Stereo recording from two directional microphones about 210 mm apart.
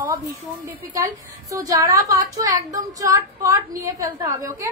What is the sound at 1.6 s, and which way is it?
A woman's voice, 15° right (ahead or behind).